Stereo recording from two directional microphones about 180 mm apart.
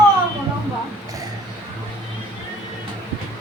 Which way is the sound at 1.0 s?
20° right (ahead or behind).